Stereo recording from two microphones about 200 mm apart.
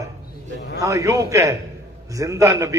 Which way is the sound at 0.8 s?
15° right (ahead or behind).